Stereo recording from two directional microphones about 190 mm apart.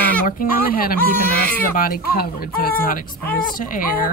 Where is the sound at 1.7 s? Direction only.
50° left (ahead or behind).